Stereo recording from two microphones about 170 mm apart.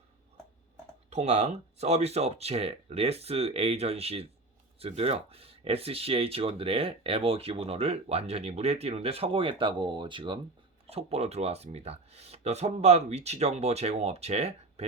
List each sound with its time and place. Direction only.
1.1 s speech: 40° right (ahead or behind)